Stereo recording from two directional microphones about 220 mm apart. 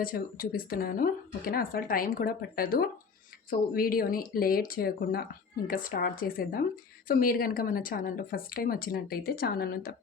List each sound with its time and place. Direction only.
0.0 s speech: 40° left (ahead or behind)